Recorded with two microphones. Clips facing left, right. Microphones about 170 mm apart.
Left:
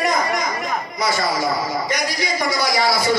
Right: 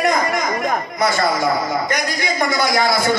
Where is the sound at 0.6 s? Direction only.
50° right (ahead or behind).